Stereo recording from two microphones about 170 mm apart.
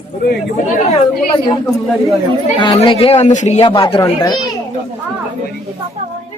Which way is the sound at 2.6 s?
30° left (ahead or behind).